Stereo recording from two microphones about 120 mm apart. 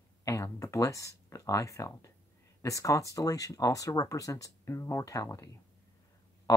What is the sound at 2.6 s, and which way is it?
Speech, 25° left (ahead or behind).